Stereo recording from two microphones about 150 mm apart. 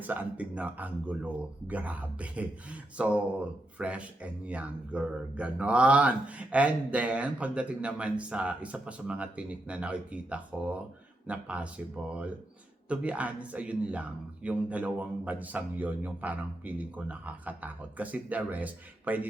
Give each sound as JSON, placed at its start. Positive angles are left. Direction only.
{"t": 0.0, "sound": "speech", "side_deg": -10}